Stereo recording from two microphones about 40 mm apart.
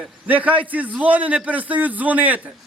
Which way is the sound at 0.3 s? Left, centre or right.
Right.